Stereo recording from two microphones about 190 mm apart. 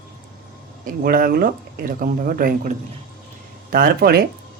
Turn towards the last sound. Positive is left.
turn(degrees=-55)  # may be behind; listen again after turning